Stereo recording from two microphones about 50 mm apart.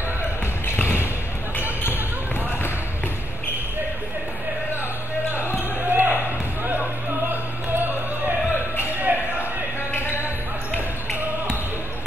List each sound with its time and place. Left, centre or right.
5.9 s basketball bounce: right
8.7 s a sound: right
9.9 s basketball bounce: left